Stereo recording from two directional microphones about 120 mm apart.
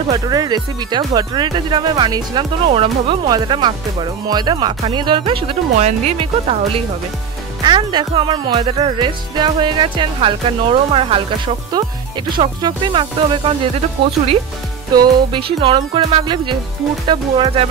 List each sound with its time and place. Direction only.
0.3 s speech: 35° right (ahead or behind)
2.7 s music: 50° right (ahead or behind)
3.3 s speech: 35° right (ahead or behind)
5.8 s speech: 80° right
6.1 s music: 50° right (ahead or behind)
7.6 s music: 40° right (ahead or behind)